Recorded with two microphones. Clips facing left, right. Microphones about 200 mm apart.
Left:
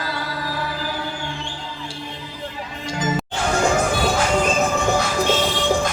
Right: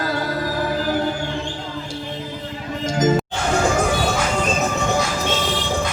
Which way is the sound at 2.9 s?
45° right (ahead or behind).